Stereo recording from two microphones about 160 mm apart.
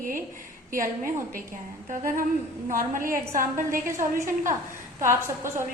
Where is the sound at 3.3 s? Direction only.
55° right (ahead or behind).